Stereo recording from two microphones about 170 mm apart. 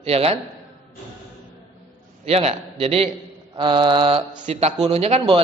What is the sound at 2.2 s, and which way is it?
Speech, 35° right (ahead or behind).